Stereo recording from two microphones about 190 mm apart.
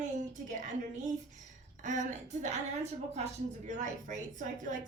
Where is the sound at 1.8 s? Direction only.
40° right (ahead or behind).